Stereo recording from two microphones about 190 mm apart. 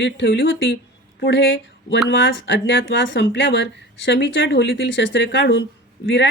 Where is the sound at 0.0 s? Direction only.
75° left (ahead or behind).